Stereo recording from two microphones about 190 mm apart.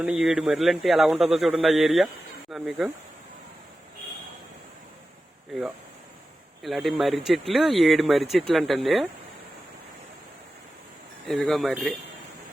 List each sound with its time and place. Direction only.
0.0 s speech: 5° right (ahead or behind)
6.6 s speech: centre (ahead or behind)
11.3 s speech: centre (ahead or behind)